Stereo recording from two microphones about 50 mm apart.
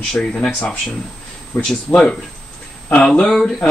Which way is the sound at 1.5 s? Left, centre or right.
Left.